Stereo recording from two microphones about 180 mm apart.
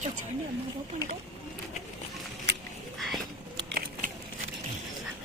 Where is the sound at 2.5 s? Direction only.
70° right (ahead or behind).